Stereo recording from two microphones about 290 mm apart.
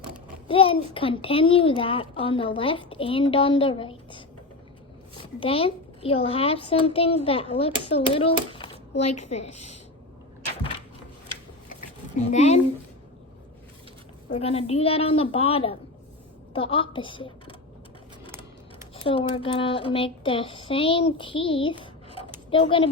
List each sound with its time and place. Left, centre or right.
0.4 s a woman's voice: centre
5.4 s a child's voice: centre
12.1 s a child's voice: left
14.3 s a child's voice: left
19.0 s a woman's voice: centre